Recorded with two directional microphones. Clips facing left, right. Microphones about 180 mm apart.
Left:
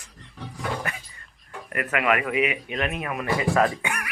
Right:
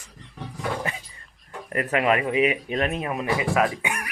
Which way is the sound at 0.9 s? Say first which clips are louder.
Right 1 dB; 25° right (ahead or behind).